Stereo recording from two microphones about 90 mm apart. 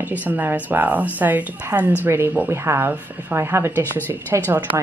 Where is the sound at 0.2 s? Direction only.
20° right (ahead or behind).